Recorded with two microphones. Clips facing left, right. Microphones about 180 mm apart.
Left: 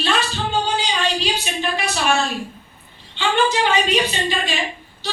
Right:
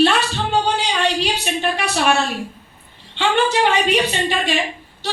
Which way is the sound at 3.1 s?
60° right (ahead or behind).